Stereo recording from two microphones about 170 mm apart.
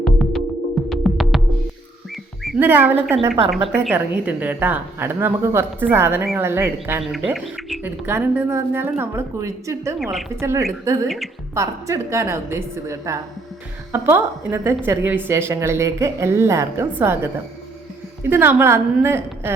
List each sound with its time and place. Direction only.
0.0 s music: centre (ahead or behind)
2.6 s speech: 10° right (ahead or behind)
7.0 s speech: centre (ahead or behind); by 9.9 s 15° right (ahead or behind)
10.0 s a woman's voice: centre (ahead or behind)
10.4 s speech: 15° right (ahead or behind)